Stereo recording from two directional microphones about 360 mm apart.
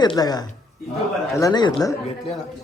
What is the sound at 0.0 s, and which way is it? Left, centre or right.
Speech, centre.